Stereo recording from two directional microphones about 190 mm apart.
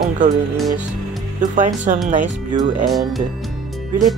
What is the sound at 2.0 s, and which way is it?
Speech, 40° right (ahead or behind).